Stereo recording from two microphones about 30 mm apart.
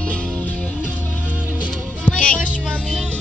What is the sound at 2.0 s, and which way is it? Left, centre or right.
Music, left.